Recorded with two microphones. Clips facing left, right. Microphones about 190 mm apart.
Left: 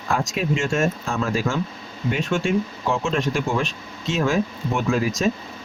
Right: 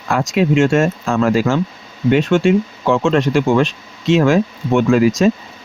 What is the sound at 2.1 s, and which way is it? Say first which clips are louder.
Speech: right 9 dB; 75° right (ahead or behind).